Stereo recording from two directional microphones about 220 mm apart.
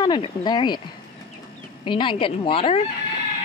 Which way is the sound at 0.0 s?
20° left (ahead or behind).